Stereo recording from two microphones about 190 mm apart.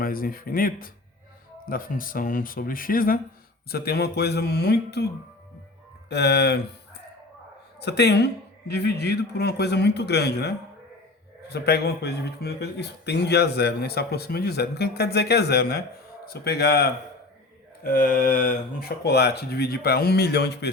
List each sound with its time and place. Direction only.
0.0 s speech: 50° left (ahead or behind)
6.1 s speech: 60° left (ahead or behind)
7.8 s speech: 60° left (ahead or behind)